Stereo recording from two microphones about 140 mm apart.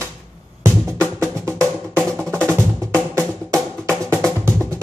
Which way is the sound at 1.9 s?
5° left (ahead or behind).